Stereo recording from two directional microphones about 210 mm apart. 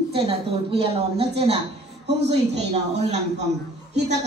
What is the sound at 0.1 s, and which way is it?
A man's voice, 25° right (ahead or behind).